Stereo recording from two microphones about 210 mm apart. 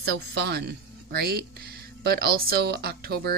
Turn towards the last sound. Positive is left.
turn(degrees=-50)  # may be behind; listen again after turning